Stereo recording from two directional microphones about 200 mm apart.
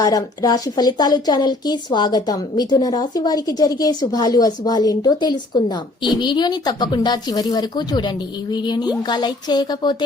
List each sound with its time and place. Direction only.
0.0 s a woman's voice: 20° left (ahead or behind)